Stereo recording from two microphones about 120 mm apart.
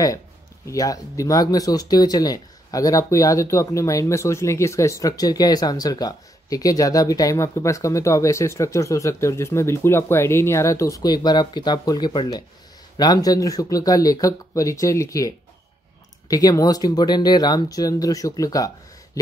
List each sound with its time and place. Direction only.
0.7 s speech: 30° left (ahead or behind)